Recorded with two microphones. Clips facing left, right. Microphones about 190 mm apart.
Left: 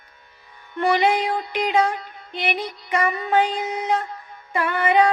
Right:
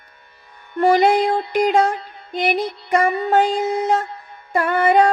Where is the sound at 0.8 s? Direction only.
45° right (ahead or behind).